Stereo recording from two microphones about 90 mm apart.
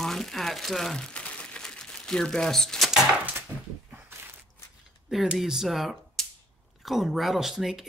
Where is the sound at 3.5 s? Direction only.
25° right (ahead or behind).